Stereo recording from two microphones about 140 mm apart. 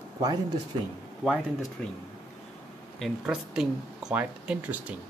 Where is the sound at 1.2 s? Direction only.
Centre (ahead or behind).